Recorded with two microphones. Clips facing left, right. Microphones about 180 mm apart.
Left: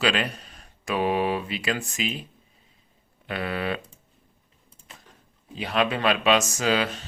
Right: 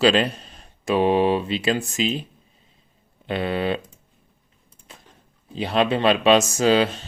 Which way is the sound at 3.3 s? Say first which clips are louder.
Right 5 dB; 25° right (ahead or behind).